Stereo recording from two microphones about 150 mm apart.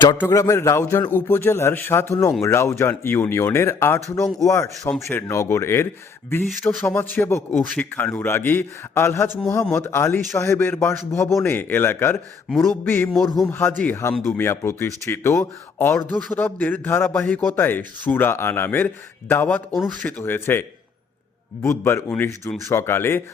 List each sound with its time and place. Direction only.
0.2 s a man's voice: 20° left (ahead or behind)